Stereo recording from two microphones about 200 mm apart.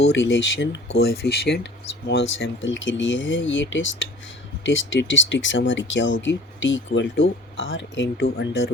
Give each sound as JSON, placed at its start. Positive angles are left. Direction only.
{"t": 0.1, "sound": "speech", "side_deg": 65}
{"t": 0.9, "sound": "speech", "side_deg": 55}
{"t": 2.4, "sound": "speech", "side_deg": 70}